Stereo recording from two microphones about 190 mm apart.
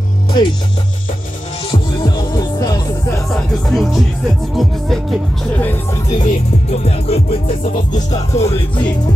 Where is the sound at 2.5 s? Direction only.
20° left (ahead or behind).